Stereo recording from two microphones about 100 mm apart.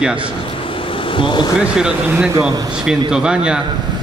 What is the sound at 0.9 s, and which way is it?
Vehicle, 60° left (ahead or behind).